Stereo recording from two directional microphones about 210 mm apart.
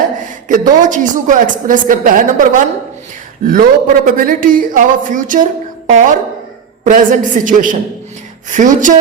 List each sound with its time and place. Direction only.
0.2 s a woman's voice: 40° right (ahead or behind)